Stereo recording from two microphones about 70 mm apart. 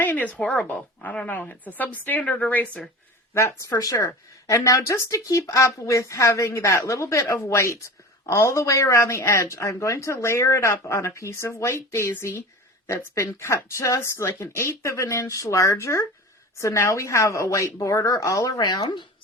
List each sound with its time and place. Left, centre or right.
0.0 s a woman's voice: left
3.3 s speech: left